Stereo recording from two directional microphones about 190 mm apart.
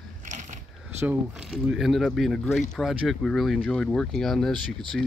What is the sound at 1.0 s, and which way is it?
Speech, 5° right (ahead or behind).